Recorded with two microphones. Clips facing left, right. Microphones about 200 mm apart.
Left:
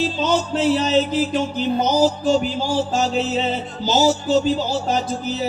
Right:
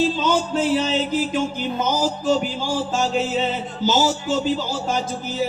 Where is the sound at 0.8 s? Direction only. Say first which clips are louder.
Left 3 dB; 45° left (ahead or behind).